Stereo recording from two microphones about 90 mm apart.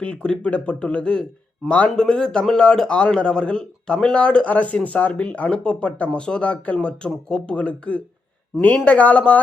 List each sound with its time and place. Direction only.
0.0 s speech: 10° left (ahead or behind)